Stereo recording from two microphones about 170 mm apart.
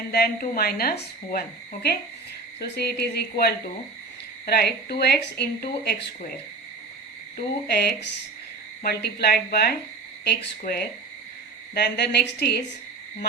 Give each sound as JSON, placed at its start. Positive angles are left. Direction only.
{"t": 0.1, "sound": "a woman's voice", "side_deg": 65}
{"t": 7.3, "sound": "a woman's voice", "side_deg": 70}
{"t": 11.7, "sound": "a woman's voice", "side_deg": 75}